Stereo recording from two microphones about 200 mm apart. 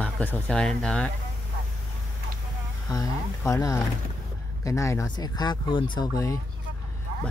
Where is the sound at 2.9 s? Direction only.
15° left (ahead or behind).